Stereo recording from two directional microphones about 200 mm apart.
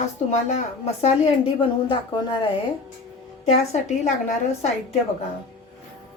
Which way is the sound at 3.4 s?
35° left (ahead or behind).